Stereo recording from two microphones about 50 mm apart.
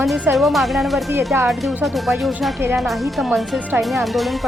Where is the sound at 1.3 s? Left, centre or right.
Right.